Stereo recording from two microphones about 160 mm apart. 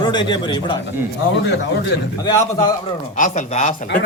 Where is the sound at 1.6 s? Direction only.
90° left.